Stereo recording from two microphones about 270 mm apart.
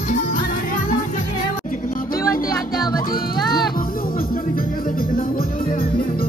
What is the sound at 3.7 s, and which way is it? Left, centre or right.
Music, left.